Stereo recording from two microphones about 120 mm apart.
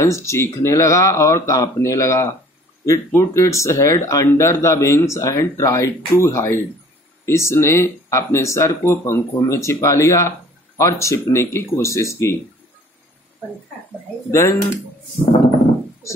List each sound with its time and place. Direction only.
0.0 s speech: 25° left (ahead or behind)
14.3 s speech: 25° left (ahead or behind)